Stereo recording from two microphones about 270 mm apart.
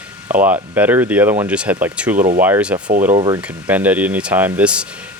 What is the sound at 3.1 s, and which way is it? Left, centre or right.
Speech, centre.